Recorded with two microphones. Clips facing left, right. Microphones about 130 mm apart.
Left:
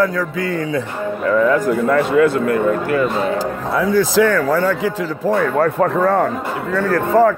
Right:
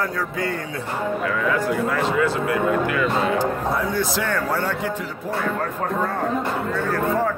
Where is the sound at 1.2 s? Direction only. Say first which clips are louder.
Left 11 dB; 40° left (ahead or behind).